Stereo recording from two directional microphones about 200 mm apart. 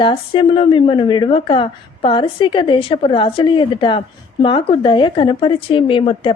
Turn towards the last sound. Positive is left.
turn(degrees=25)  # may be behind; listen again after turning